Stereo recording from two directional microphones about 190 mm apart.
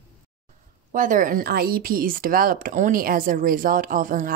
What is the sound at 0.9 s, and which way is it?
Speech, 45° right (ahead or behind).